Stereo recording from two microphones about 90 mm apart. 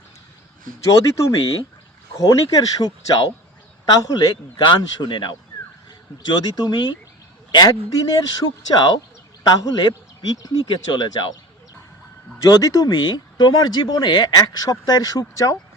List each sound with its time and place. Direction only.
0.8 s speech: 35° left (ahead or behind); by 6.9 s 55° left (ahead or behind)
7.5 s speech: 45° left (ahead or behind)
10.7 s speech: 60° left (ahead or behind)
12.4 s speech: 45° left (ahead or behind)